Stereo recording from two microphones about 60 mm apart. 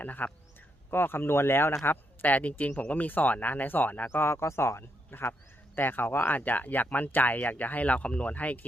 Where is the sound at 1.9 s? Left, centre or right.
Left.